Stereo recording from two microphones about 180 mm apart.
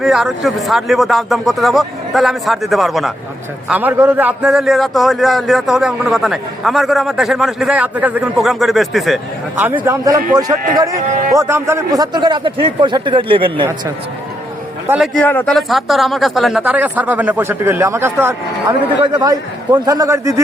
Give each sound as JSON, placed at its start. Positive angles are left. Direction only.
{"t": 0.0, "sound": "a man's voice", "side_deg": 0}
{"t": 11.0, "sound": "a man's voice", "side_deg": -45}
{"t": 11.3, "sound": "a man's voice", "side_deg": -15}
{"t": 14.8, "sound": "a man's voice", "side_deg": -5}